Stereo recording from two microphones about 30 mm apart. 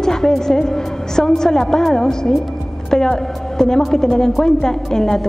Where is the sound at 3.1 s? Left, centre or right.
Left.